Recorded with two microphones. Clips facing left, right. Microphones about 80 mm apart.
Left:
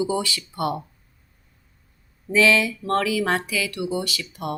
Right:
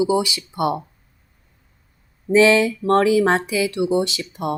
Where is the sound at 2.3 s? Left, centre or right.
Right.